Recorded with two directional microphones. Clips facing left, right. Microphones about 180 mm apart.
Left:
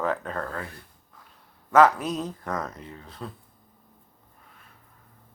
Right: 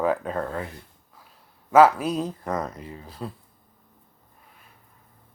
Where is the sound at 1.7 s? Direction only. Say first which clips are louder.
Right 2 dB; 10° right (ahead or behind).